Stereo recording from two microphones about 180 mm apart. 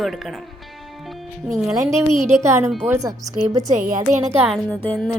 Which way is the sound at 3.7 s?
45° right (ahead or behind).